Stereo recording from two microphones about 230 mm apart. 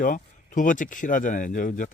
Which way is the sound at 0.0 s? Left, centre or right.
Left.